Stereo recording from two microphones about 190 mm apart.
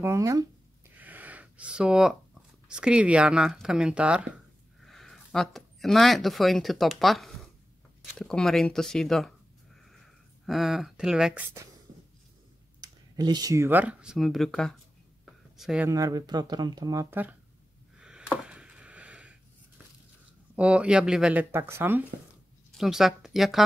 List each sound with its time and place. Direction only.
0.0 s speech: 15° right (ahead or behind)
0.9 s a sound: 10° right (ahead or behind)
2.7 s speech: 5° right (ahead or behind)
10.4 s speech: centre (ahead or behind)
12.8 s speech: 20° right (ahead or behind); by 14.8 s centre (ahead or behind)
15.2 s a sound: centre (ahead or behind)
15.9 s speech: 20° right (ahead or behind)
17.9 s a sound: 5° right (ahead or behind)
20.5 s speech: 5° right (ahead or behind)
22.7 s speech: centre (ahead or behind)